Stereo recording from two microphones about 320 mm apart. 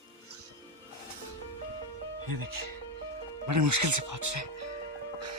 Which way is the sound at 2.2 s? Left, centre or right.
Right.